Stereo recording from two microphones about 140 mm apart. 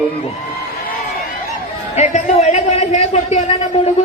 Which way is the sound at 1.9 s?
55° left (ahead or behind).